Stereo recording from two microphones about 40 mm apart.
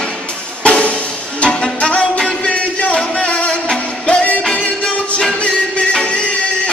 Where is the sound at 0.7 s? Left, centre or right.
Left.